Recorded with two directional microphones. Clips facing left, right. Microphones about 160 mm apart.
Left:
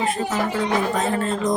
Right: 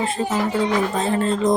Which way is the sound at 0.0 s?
30° right (ahead or behind).